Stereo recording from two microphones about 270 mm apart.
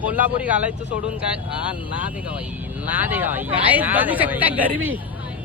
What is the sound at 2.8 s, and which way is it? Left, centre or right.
Speech, centre.